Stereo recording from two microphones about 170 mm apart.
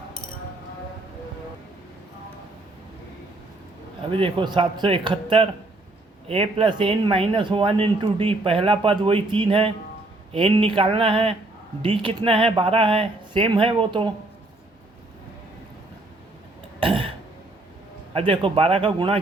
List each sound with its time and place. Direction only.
4.1 s a man's voice: 30° right (ahead or behind)
16.8 s burping: 30° right (ahead or behind)
18.1 s a man's voice: 30° right (ahead or behind)